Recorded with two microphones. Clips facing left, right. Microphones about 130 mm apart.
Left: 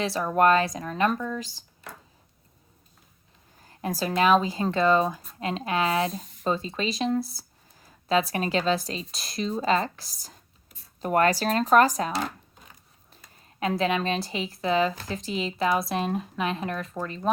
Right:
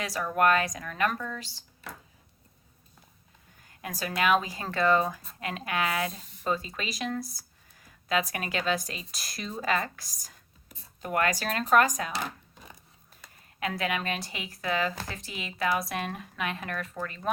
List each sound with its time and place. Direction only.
0.0 s speech: 25° left (ahead or behind)
3.6 s speech: 35° left (ahead or behind)
13.6 s speech: 25° left (ahead or behind)